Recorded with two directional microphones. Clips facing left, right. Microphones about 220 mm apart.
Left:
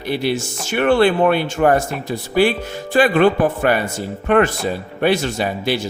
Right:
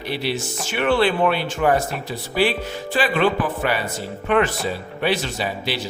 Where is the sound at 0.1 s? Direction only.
50° left (ahead or behind).